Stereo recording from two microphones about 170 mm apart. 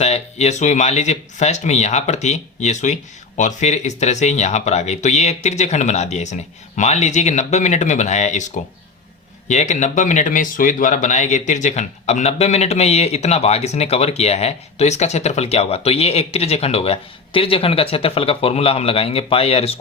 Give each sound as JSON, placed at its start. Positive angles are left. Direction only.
{"t": 0.0, "sound": "speech", "side_deg": 40}